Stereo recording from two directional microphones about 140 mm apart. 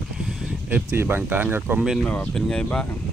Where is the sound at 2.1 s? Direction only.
10° left (ahead or behind).